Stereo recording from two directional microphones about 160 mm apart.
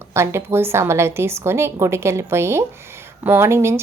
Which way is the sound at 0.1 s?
15° right (ahead or behind).